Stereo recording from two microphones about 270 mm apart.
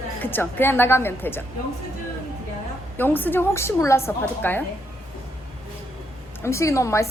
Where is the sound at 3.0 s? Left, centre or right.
Centre.